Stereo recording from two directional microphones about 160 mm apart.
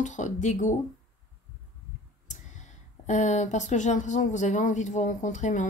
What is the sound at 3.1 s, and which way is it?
Speech, 50° left (ahead or behind).